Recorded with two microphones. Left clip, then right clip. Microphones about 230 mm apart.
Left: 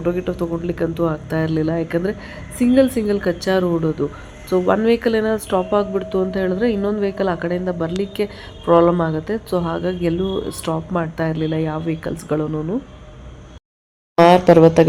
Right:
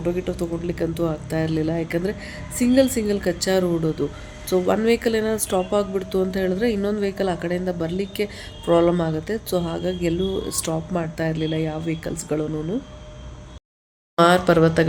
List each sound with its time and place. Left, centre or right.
0.0 s speech: centre
14.3 s speech: left